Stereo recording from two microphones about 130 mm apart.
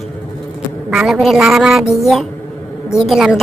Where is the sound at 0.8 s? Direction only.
5° right (ahead or behind).